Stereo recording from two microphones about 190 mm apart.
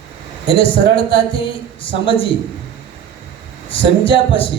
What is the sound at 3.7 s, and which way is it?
Speech, 30° left (ahead or behind).